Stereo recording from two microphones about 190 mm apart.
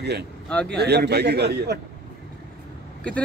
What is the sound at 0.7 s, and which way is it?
Speech, 60° right (ahead or behind).